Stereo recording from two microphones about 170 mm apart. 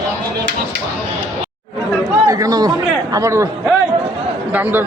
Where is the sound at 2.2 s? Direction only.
20° right (ahead or behind).